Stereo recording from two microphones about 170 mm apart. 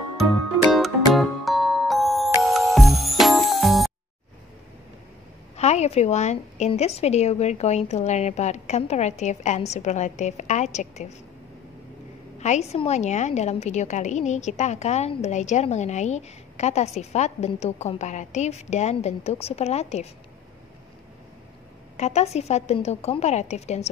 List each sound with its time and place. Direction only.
0.6 s music: centre (ahead or behind)
5.6 s a woman's voice: 40° left (ahead or behind)
12.4 s a woman's voice: 40° left (ahead or behind)
21.9 s a woman's voice: 40° left (ahead or behind)